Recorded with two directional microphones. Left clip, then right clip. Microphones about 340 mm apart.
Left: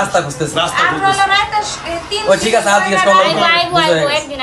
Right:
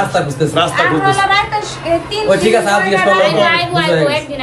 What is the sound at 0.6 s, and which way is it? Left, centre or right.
Speech, centre.